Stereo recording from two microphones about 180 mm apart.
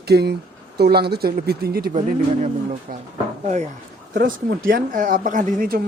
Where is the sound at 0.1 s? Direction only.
65° right (ahead or behind).